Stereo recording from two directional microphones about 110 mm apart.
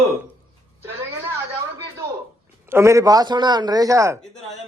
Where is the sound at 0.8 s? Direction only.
25° right (ahead or behind).